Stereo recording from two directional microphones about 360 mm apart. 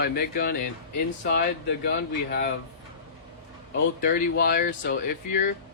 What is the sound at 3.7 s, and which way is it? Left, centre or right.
Speech, left.